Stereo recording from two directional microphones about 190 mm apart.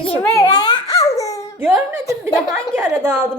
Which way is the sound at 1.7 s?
15° right (ahead or behind).